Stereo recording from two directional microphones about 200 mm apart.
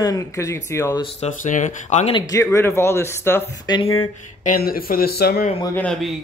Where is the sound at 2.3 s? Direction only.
15° left (ahead or behind).